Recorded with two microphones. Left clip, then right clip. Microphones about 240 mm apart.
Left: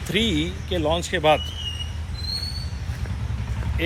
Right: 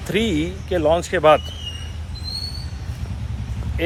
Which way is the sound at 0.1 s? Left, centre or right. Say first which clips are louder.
Right 2 dB; right.